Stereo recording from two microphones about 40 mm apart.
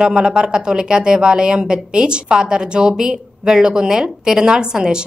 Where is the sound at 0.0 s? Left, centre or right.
Right.